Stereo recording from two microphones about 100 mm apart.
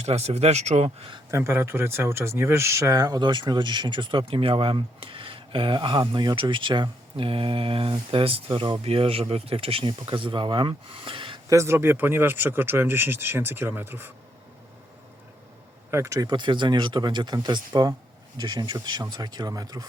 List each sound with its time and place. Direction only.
0.0 s speech: 90° right
1.3 s speech: 25° right (ahead or behind); by 11.3 s 60° right (ahead or behind)
11.4 s speech: 30° right (ahead or behind)
15.9 s speech: 30° right (ahead or behind)
16.3 s speech: 50° right (ahead or behind)